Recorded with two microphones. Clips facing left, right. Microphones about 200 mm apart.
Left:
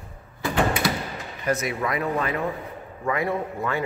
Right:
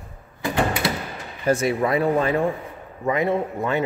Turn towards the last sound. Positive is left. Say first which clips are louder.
# right 4 dB
turn(degrees=-20)  # may be behind; listen again after turning